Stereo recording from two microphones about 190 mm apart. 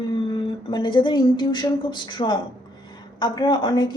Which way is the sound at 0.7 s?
25° left (ahead or behind).